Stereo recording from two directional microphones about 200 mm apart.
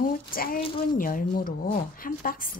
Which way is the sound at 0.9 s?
45° left (ahead or behind).